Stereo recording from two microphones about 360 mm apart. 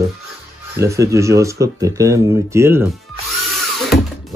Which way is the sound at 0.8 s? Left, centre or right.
Centre.